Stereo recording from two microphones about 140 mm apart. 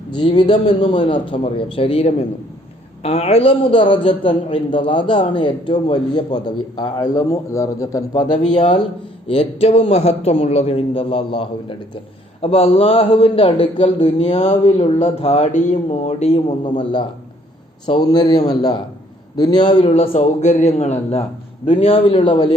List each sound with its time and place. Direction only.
0.1 s a man's voice: 35° left (ahead or behind)
0.5 s a man's voice: 55° left (ahead or behind)
0.9 s a man's voice: 35° left (ahead or behind)
8.3 s a man's voice: 60° left (ahead or behind)
9.2 s a man's voice: 45° left (ahead or behind)
15.5 s a man's voice: 60° left (ahead or behind)
16.6 s a man's voice: 35° left (ahead or behind)
19.8 s a man's voice: 45° left (ahead or behind)